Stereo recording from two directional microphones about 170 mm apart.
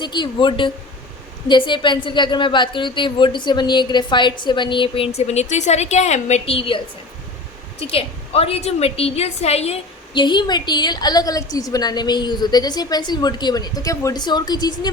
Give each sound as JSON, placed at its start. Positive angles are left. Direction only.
{"t": 0.0, "sound": "a woman's voice", "side_deg": 25}
{"t": 10.2, "sound": "a woman's voice", "side_deg": 25}